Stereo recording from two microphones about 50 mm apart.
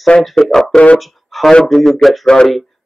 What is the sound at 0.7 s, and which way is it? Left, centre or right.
Speech, left.